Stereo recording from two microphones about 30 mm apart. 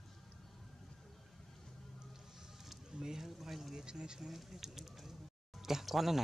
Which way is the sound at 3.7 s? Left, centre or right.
Right.